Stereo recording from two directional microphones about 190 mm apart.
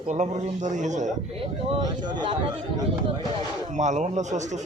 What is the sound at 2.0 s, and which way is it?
Speech, 25° right (ahead or behind).